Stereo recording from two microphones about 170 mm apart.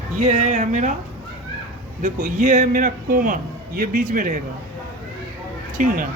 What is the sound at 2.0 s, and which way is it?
A man's voice, 50° right (ahead or behind).